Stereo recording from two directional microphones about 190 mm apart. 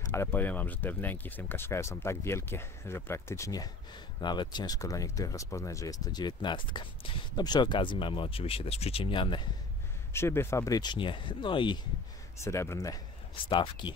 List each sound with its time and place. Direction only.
0.1 s speech: 10° left (ahead or behind)
10.1 s speech: 15° left (ahead or behind)
12.4 s speech: 15° left (ahead or behind)